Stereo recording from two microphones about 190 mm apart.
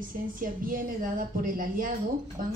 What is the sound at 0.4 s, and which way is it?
A woman's voice, 45° right (ahead or behind).